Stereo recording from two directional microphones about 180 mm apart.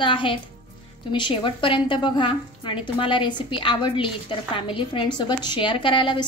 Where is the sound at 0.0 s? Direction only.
30° left (ahead or behind).